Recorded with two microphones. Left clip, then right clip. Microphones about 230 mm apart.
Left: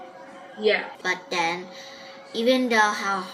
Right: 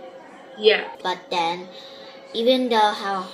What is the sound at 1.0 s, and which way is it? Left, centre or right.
A woman's voice, centre.